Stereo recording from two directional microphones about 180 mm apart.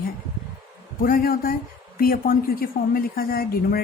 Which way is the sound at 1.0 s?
55° left (ahead or behind).